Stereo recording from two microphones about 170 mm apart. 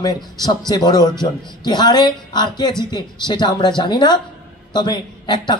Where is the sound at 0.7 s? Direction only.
25° left (ahead or behind).